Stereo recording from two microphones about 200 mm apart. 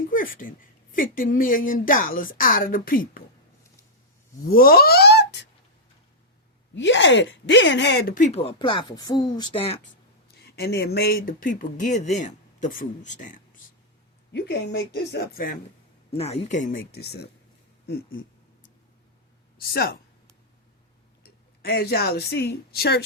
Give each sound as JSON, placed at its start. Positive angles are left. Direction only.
{"t": 0.1, "sound": "speech", "side_deg": 45}
{"t": 4.5, "sound": "speech", "side_deg": 50}
{"t": 6.7, "sound": "speech", "side_deg": 65}
{"t": 10.2, "sound": "speech", "side_deg": 50}
{"t": 14.3, "sound": "speech", "side_deg": 55}
{"t": 16.1, "sound": "speech", "side_deg": 30}
{"t": 19.7, "sound": "speech", "side_deg": 50}
{"t": 21.2, "sound": "speech", "side_deg": 55}